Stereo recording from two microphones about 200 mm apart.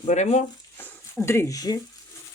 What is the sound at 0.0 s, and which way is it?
Speech, 35° left (ahead or behind).